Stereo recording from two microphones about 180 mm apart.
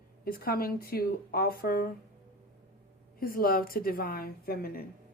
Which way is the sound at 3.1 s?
55° left (ahead or behind).